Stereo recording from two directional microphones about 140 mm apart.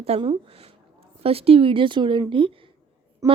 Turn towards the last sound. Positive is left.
turn(degrees=-20)  # may be behind; listen again after turning